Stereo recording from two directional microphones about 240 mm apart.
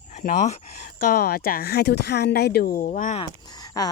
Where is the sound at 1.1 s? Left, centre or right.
Left.